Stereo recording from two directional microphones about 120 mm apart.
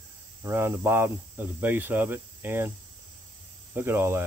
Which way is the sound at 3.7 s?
20° right (ahead or behind).